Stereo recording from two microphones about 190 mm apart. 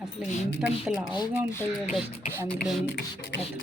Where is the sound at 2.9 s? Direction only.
65° left (ahead or behind).